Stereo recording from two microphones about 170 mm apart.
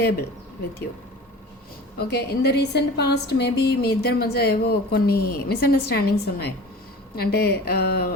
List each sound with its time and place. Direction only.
2.0 s a woman's voice: 70° left (ahead or behind)